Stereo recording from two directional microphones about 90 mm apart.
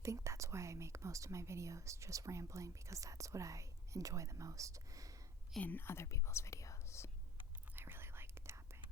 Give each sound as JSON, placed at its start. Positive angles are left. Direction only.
{"t": 0.0, "sound": "speech", "side_deg": -35}
{"t": 5.5, "sound": "speech", "side_deg": 20}
{"t": 7.8, "sound": "whispering", "side_deg": -25}